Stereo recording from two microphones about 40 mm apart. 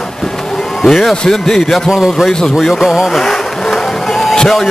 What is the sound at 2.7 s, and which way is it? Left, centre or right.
Music, centre.